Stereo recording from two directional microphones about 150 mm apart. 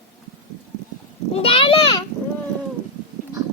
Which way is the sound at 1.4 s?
40° left (ahead or behind).